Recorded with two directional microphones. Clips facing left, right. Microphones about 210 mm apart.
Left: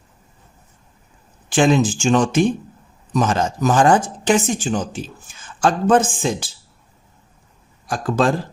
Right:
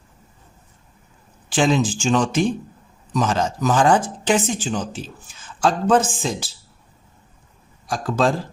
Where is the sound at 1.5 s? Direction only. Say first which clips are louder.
Left 3 dB; 50° left (ahead or behind).